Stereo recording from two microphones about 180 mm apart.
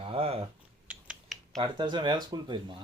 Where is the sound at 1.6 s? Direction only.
25° right (ahead or behind).